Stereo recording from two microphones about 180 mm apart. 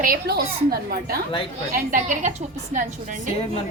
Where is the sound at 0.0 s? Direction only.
55° right (ahead or behind).